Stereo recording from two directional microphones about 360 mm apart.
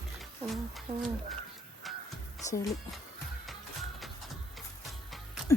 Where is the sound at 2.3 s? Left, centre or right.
Centre.